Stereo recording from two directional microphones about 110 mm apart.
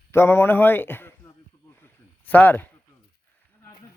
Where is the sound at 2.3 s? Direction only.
15° left (ahead or behind).